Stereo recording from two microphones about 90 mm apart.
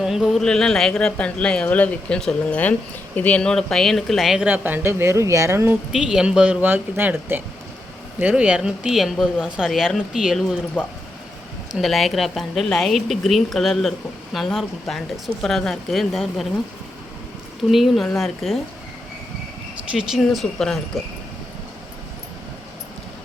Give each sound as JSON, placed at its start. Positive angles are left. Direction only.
{"t": 0.0, "sound": "speech", "side_deg": -5}
{"t": 4.4, "sound": "speech", "side_deg": -20}
{"t": 5.9, "sound": "speech", "side_deg": -5}
{"t": 11.7, "sound": "speech", "side_deg": 0}
{"t": 17.7, "sound": "speech", "side_deg": 0}
{"t": 19.9, "sound": "speech", "side_deg": -10}
{"t": 20.1, "sound": "speech", "side_deg": 0}